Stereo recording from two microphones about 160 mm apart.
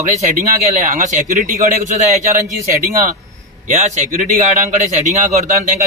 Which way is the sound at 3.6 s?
45° right (ahead or behind).